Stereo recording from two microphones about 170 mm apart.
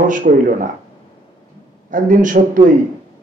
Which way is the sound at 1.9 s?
50° right (ahead or behind).